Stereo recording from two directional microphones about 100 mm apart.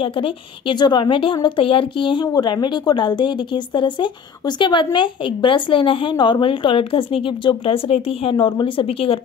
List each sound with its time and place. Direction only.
0.0 s a woman's voice: 60° left (ahead or behind)
2.2 s a woman's voice: 45° left (ahead or behind); by 9.2 s 70° left (ahead or behind)